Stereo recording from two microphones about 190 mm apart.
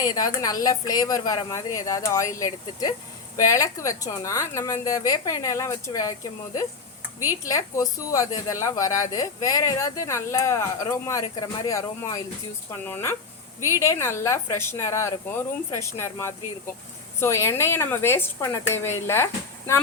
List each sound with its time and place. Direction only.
0.0 s speech: 20° left (ahead or behind)